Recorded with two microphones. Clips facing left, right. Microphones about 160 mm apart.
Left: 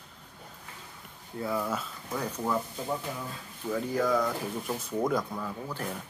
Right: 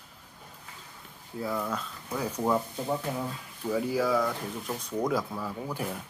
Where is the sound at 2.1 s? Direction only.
5° right (ahead or behind).